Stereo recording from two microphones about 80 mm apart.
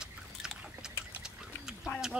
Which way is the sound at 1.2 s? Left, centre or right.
Centre.